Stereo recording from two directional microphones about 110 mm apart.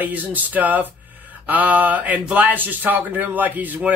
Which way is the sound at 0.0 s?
15° right (ahead or behind).